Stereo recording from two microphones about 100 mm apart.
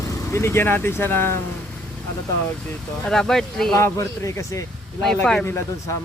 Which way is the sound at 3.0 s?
5° left (ahead or behind).